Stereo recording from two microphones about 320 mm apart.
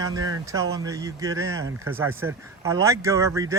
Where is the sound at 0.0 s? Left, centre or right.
Centre.